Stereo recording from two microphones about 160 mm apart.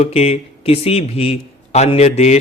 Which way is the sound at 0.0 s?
40° left (ahead or behind).